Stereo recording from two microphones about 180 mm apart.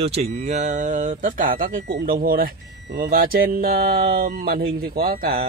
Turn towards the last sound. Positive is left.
turn(degrees=-55)  # may be behind; listen again after turning